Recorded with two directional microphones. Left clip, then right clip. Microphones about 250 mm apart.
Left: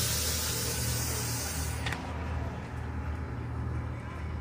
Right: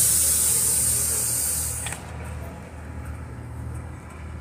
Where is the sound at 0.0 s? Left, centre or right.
Right.